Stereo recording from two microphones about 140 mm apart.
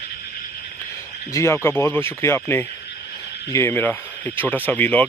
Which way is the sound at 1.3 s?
20° left (ahead or behind).